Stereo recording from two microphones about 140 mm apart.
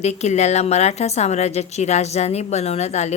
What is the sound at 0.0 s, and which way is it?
A woman's voice, 50° left (ahead or behind).